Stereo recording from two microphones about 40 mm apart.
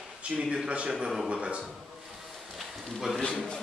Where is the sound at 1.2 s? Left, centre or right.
Right.